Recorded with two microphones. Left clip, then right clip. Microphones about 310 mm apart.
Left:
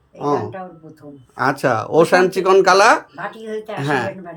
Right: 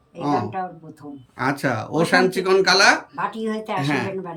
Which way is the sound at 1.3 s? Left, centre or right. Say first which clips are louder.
Left 6 dB; centre.